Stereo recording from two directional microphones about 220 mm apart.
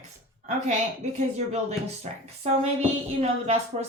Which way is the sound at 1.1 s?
30° right (ahead or behind).